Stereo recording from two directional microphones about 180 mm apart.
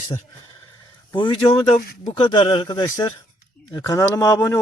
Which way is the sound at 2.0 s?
25° left (ahead or behind).